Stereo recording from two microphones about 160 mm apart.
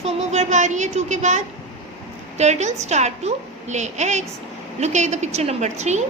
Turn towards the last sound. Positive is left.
turn(degrees=-45)  # may be behind; listen again after turning